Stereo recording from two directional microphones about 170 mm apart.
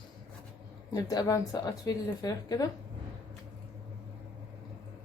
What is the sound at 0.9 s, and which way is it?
Speech, 20° left (ahead or behind).